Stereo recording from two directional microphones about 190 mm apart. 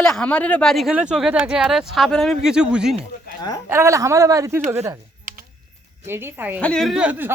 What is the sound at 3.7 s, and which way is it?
Speech, 15° right (ahead or behind).